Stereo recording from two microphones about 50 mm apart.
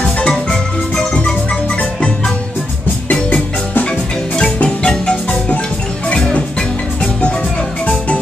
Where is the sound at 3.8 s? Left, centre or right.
Left.